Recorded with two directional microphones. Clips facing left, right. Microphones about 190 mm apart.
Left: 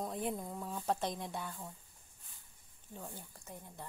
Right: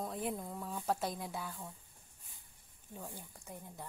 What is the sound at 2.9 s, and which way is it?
Speech, 10° right (ahead or behind).